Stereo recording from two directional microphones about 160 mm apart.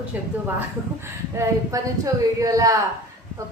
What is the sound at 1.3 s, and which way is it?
A woman's voice, 20° right (ahead or behind).